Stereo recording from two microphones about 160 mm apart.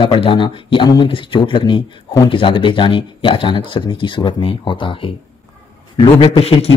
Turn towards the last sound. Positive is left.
turn(degrees=35)  # may be behind; listen again after turning